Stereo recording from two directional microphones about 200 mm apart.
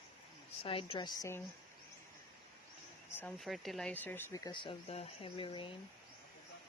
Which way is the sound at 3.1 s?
5° left (ahead or behind).